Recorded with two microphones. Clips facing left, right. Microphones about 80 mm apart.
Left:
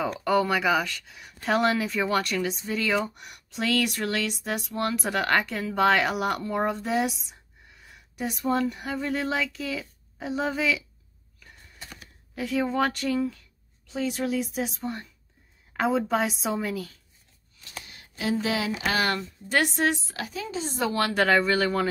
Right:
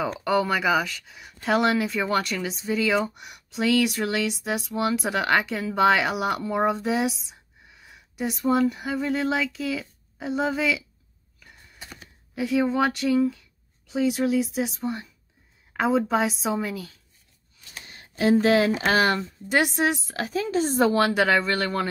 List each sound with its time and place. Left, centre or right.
0.0 s speech: centre
11.3 s a sound: centre
12.4 s speech: centre
15.7 s a sound: centre
16.0 s speech: centre
17.8 s a sound: right
18.7 s a woman's voice: right; by 20.0 s centre
20.2 s a woman's voice: right
21.1 s speech: centre